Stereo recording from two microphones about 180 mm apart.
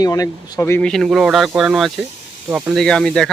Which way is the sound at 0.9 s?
Centre (ahead or behind).